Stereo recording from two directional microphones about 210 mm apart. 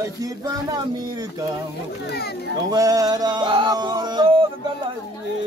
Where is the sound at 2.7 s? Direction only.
15° right (ahead or behind).